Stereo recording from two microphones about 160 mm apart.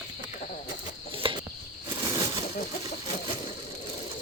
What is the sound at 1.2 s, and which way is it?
Cricket, 35° right (ahead or behind).